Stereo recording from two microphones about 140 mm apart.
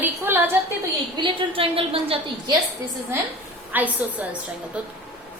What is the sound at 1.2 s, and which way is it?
A woman's voice, 40° right (ahead or behind).